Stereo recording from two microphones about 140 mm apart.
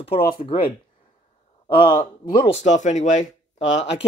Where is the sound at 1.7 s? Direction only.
35° left (ahead or behind).